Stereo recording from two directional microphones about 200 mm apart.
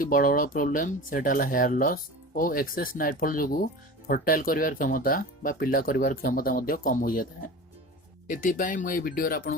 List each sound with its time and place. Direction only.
0.0 s speech: 45° left (ahead or behind)